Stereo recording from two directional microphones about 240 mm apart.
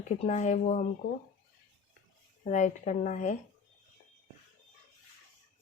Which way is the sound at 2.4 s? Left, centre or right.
Left.